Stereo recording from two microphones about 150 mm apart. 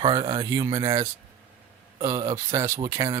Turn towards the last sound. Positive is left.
turn(degrees=-20)  # may be behind; listen again after turning